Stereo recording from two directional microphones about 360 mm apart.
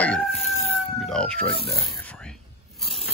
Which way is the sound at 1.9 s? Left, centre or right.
Centre.